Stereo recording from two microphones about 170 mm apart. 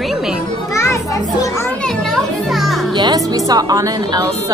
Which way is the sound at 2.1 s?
Centre (ahead or behind).